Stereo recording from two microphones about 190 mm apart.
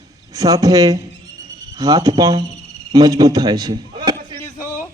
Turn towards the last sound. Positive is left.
turn(degrees=-20)  # may be behind; listen again after turning